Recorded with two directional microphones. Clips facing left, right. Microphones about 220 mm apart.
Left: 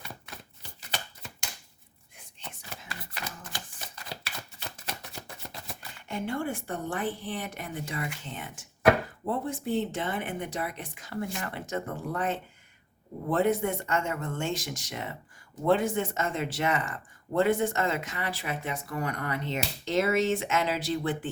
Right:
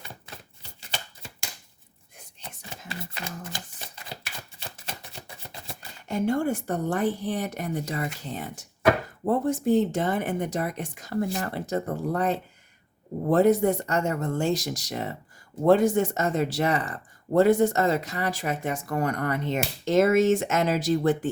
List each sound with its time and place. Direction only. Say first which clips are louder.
2.9 s shuffling cards: right 5 dB; 25° right (ahead or behind)
5.6 s speech: right 4 dB; 40° right (ahead or behind)